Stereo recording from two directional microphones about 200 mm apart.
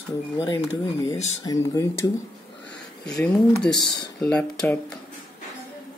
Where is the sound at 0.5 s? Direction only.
20° left (ahead or behind).